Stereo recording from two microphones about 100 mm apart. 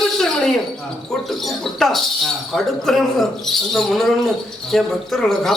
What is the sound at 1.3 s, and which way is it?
A man's voice, centre (ahead or behind).